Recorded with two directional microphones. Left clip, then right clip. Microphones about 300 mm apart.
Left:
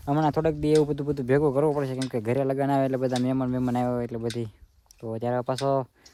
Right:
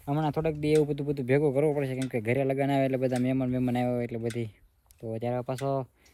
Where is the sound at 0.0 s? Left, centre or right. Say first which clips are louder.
Left 5 dB; centre.